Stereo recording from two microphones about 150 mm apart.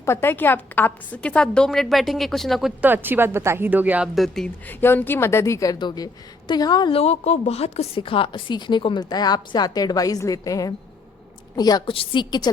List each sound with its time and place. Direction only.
0.0 s speech: 15° left (ahead or behind); by 2.9 s centre (ahead or behind)
2.9 s a woman's voice: 15° right (ahead or behind); by 12.5 s 30° left (ahead or behind)